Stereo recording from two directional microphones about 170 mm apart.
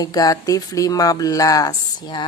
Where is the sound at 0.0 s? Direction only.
20° left (ahead or behind).